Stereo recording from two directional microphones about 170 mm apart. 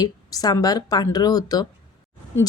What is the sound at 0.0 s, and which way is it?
A woman's voice, 20° left (ahead or behind).